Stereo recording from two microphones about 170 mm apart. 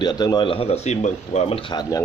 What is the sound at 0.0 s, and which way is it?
Speech, 25° left (ahead or behind).